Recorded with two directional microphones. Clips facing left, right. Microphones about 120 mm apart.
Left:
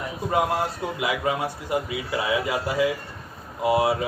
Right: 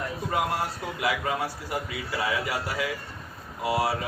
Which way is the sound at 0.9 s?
20° left (ahead or behind).